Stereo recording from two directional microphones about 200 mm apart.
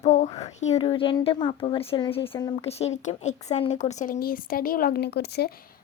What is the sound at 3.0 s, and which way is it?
Speech, 35° left (ahead or behind).